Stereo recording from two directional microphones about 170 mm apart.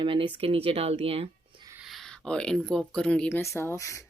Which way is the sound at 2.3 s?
5° left (ahead or behind).